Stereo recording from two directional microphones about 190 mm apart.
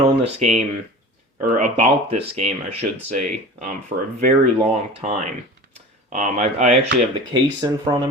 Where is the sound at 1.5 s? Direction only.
40° right (ahead or behind).